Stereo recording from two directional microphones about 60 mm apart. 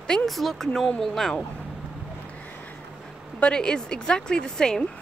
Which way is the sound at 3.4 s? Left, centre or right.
Centre.